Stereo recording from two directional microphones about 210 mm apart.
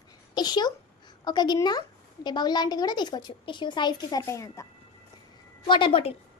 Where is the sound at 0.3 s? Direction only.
20° left (ahead or behind).